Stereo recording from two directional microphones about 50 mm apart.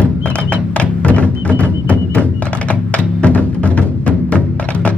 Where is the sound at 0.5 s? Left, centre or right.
Left.